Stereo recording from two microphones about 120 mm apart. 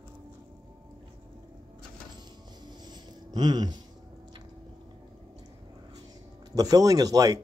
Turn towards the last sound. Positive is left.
turn(degrees=-30)  # may be behind; listen again after turning